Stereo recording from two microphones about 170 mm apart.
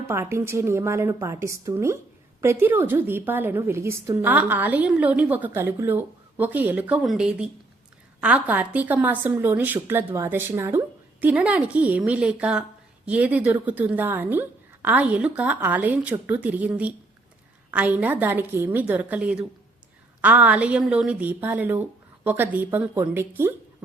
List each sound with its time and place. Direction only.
0.1 s a woman's voice: 15° right (ahead or behind)